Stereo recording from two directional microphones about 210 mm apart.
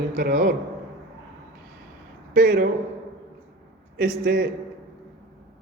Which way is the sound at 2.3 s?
40° right (ahead or behind).